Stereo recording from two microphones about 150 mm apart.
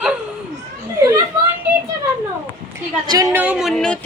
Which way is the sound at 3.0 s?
25° right (ahead or behind).